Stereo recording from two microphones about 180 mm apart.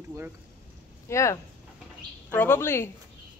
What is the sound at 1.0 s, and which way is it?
A woman's voice, 15° left (ahead or behind).